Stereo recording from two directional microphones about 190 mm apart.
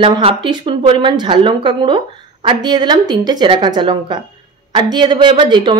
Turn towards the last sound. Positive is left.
turn(degrees=-25)  # may be behind; listen again after turning